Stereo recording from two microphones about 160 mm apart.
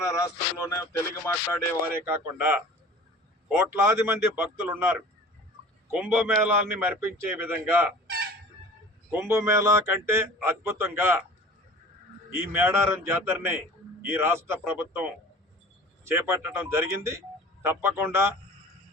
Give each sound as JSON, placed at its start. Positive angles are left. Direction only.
{"t": 0.1, "sound": "speech", "side_deg": 20}
{"t": 2.0, "sound": "a man's voice", "side_deg": -15}
{"t": 9.1, "sound": "a man's voice", "side_deg": -15}
{"t": 12.3, "sound": "a man's voice", "side_deg": -15}